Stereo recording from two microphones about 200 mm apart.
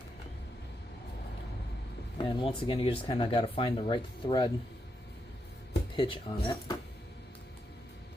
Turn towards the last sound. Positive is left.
turn(degrees=20)  # may be behind; listen again after turning